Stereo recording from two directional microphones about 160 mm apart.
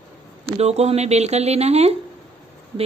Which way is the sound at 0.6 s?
40° right (ahead or behind).